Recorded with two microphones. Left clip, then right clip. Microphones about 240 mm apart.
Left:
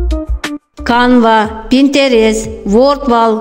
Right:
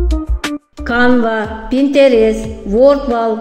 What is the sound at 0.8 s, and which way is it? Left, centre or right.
Speech, left.